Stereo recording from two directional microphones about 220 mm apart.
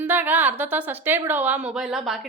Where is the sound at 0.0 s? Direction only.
10° right (ahead or behind).